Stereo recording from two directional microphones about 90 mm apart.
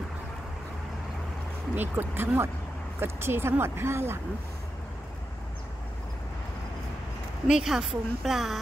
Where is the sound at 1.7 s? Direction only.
25° right (ahead or behind).